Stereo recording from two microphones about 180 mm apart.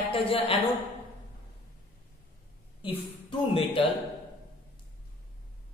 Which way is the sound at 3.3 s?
30° left (ahead or behind).